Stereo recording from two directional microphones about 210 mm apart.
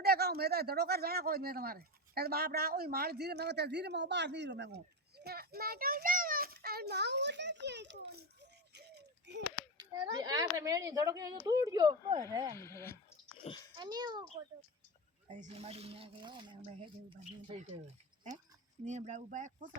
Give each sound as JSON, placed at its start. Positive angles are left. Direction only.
{"t": 0.0, "sound": "speech", "side_deg": -50}
{"t": 9.9, "sound": "speech", "side_deg": -20}
{"t": 12.5, "sound": "a child's voice", "side_deg": 15}
{"t": 13.7, "sound": "speech", "side_deg": -20}
{"t": 15.3, "sound": "speech", "side_deg": -35}
{"t": 18.9, "sound": "speech", "side_deg": -35}